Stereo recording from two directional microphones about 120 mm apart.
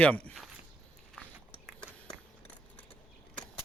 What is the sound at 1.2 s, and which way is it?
Biting, 10° left (ahead or behind).